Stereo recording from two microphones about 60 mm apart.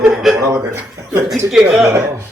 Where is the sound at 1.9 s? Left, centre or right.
Right.